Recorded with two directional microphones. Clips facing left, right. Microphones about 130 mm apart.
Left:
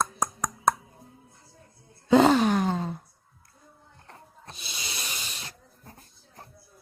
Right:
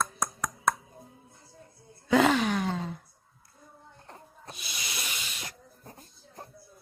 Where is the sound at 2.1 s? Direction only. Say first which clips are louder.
Left 4 dB; 30° left (ahead or behind).